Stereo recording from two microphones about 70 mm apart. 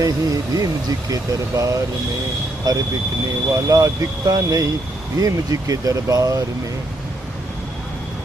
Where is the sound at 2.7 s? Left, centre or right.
Right.